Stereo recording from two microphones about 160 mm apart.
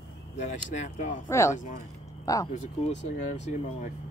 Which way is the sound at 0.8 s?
50° left (ahead or behind).